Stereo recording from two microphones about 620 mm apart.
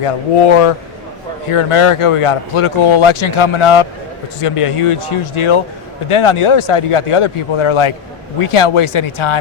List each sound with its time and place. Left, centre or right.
0.0 s speech: left